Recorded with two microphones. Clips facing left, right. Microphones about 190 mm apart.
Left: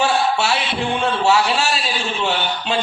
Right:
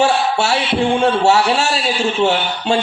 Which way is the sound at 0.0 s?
40° right (ahead or behind).